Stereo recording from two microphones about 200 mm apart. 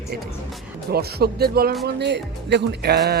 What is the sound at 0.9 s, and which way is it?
Speech, 50° right (ahead or behind).